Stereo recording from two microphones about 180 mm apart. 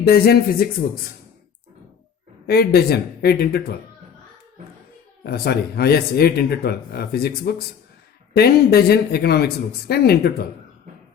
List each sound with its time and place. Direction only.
0.0 s speech: 60° left (ahead or behind)
2.5 s speech: 60° left (ahead or behind)
5.2 s speech: 60° left (ahead or behind)